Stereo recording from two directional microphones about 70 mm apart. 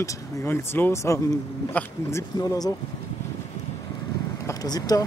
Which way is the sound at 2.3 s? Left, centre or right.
Left.